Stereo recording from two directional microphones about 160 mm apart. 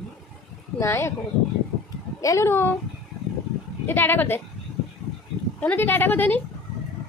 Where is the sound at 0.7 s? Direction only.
15° left (ahead or behind).